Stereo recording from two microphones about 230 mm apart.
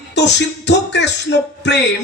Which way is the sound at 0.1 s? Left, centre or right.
Left.